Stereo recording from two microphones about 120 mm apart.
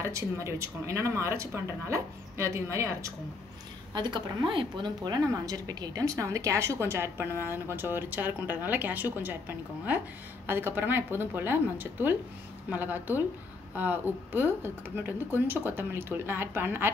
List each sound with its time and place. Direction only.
0.0 s a woman's voice: 25° right (ahead or behind)
3.9 s a woman's voice: 40° right (ahead or behind); by 9.4 s 15° right (ahead or behind)
10.4 s a woman's voice: 20° right (ahead or behind)